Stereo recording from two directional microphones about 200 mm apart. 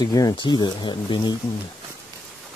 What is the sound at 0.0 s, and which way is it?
Speech, 20° left (ahead or behind).